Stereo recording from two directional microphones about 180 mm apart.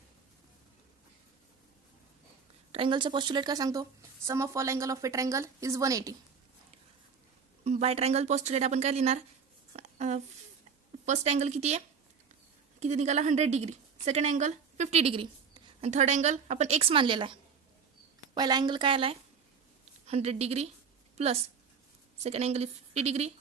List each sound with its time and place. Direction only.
2.7 s a woman's voice: 25° right (ahead or behind)
7.6 s a woman's voice: 35° right (ahead or behind)
9.7 s a sound: 40° right (ahead or behind)
11.0 s a woman's voice: 40° right (ahead or behind)
12.8 s a woman's voice: 40° right (ahead or behind)
22.2 s a woman's voice: 35° right (ahead or behind)